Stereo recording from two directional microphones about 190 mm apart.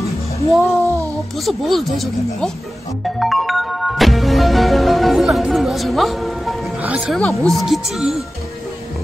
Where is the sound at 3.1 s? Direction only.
Centre (ahead or behind).